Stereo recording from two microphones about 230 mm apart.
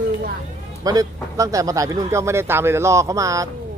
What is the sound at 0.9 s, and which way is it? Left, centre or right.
Speech, centre.